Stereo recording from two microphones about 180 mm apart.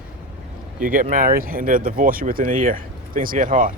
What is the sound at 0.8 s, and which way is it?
Speech, 50° right (ahead or behind).